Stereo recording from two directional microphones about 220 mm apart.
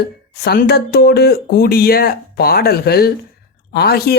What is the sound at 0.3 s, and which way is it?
Speech, 45° left (ahead or behind).